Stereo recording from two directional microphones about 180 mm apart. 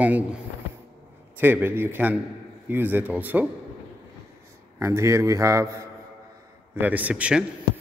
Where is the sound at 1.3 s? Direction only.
10° right (ahead or behind).